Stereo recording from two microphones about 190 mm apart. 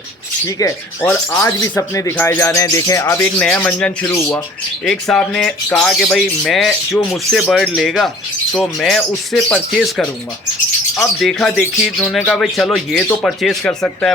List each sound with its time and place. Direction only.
0.4 s speech: 15° left (ahead or behind)
4.9 s speech: 5° left (ahead or behind)
11.2 s speech: centre (ahead or behind)